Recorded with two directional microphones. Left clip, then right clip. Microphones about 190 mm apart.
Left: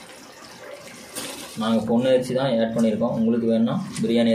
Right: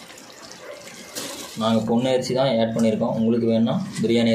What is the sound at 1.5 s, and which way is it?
Speech, 15° right (ahead or behind).